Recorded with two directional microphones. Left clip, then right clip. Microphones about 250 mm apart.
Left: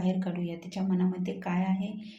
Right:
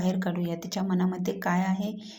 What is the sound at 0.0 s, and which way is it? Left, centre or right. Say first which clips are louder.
A woman's voice: right 3 dB; centre.